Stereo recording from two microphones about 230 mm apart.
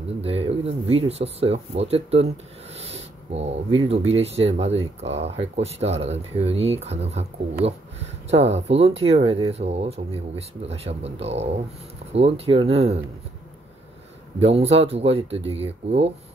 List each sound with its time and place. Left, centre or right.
0.2 s speech: right
2.9 s a sound: right
4.1 s speech: right
14.4 s speech: right